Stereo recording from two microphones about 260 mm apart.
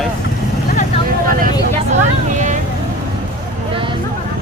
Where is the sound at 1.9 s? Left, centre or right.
Right.